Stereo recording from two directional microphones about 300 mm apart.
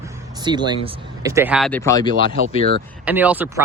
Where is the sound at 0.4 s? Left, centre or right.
Centre.